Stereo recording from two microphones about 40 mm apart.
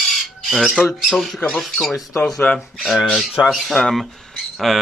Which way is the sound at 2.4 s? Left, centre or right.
Left.